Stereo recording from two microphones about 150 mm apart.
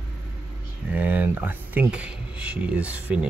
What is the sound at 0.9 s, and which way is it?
Speech, 10° right (ahead or behind).